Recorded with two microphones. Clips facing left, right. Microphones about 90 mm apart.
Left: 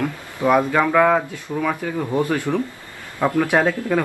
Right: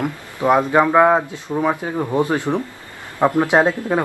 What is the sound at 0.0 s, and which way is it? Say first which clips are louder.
A man's voice: right 1 dB; 20° right (ahead or behind).